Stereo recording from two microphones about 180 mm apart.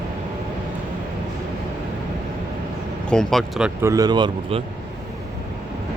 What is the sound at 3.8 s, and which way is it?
Speech, 20° right (ahead or behind).